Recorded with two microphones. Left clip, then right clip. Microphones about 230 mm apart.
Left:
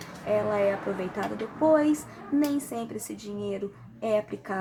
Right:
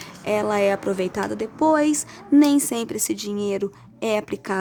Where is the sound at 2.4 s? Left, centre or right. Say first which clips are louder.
Right 9 dB; right.